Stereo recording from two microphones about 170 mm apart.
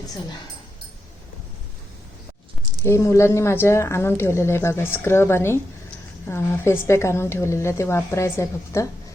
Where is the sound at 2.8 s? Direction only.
15° left (ahead or behind).